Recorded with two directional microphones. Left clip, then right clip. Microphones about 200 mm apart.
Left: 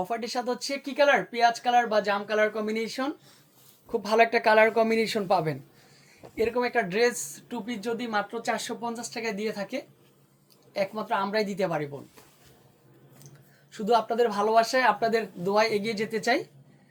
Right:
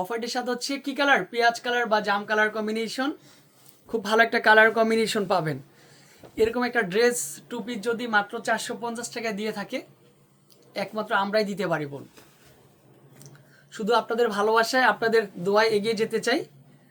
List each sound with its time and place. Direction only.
0.0 s speech: 20° right (ahead or behind)
13.7 s speech: 15° right (ahead or behind)